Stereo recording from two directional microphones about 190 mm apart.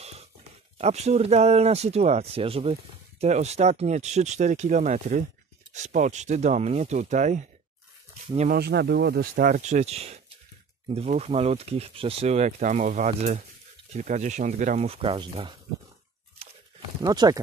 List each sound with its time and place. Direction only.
0.7 s speech: 35° right (ahead or behind)
8.5 s speech: 55° right (ahead or behind)
9.3 s speech: 45° right (ahead or behind)
16.4 s crunch: 30° right (ahead or behind)
17.0 s speech: 20° right (ahead or behind)